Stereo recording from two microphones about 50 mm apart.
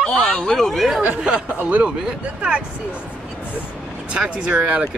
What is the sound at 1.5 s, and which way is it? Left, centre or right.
Speech, right.